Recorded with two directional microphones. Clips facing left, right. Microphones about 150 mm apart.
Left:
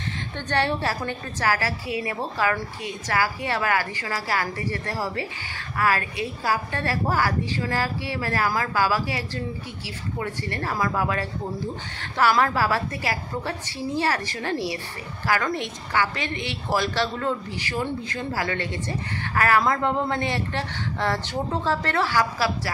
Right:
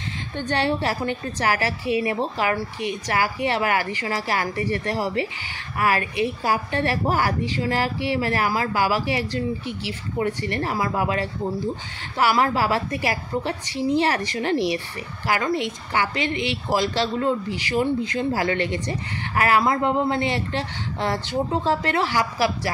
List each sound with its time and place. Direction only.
0.4 s a woman's voice: 15° right (ahead or behind)